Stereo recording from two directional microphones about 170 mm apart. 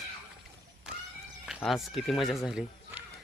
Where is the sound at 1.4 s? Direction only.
Centre (ahead or behind).